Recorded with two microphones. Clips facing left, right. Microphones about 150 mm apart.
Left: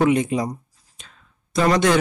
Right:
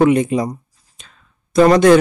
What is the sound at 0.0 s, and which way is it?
Speech, 55° right (ahead or behind).